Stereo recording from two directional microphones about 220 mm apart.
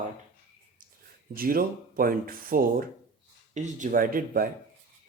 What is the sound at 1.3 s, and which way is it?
Speech, 40° right (ahead or behind).